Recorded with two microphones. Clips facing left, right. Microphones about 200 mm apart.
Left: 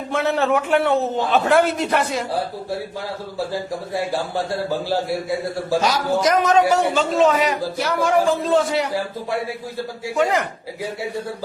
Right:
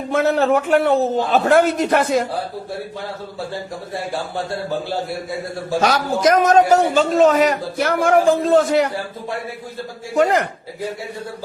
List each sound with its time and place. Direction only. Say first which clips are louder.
0.1 s a man's voice: right 3 dB; 45° right (ahead or behind)
5.8 s speech: right 5 dB; 60° right (ahead or behind)
6.4 s a man's voice: right 3 dB; 45° right (ahead or behind)